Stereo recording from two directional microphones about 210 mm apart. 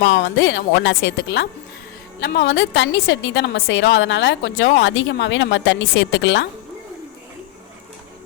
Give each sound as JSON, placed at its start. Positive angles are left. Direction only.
{"t": 0.0, "sound": "a woman's voice", "side_deg": 55}